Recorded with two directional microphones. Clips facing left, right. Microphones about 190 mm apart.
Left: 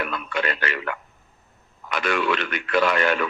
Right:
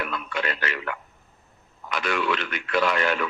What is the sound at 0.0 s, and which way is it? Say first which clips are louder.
A man's voice: left 3 dB; 60° left (ahead or behind).